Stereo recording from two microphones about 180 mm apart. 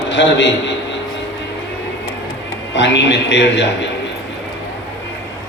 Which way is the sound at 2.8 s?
75° left (ahead or behind).